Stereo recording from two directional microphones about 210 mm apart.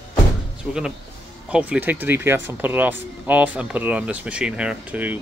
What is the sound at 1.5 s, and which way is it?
Speech, 5° right (ahead or behind).